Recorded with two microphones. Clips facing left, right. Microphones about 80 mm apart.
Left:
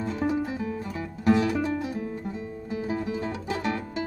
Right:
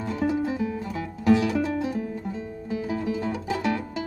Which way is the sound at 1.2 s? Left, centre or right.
Left.